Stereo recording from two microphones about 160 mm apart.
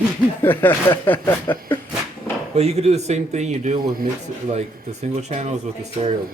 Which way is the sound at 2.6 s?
40° right (ahead or behind).